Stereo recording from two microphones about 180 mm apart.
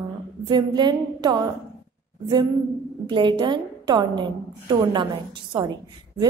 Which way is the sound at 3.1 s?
25° right (ahead or behind).